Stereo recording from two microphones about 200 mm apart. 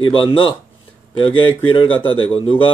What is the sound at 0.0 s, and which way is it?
Speech, 25° left (ahead or behind).